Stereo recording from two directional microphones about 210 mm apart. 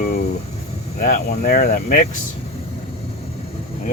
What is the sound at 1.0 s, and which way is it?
Speech, 45° left (ahead or behind).